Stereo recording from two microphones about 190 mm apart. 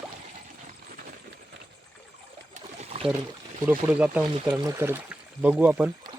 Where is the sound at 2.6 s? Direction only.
35° right (ahead or behind).